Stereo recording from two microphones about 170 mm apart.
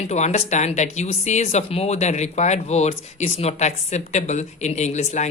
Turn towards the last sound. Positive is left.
turn(degrees=40)  # may be behind; listen again after turning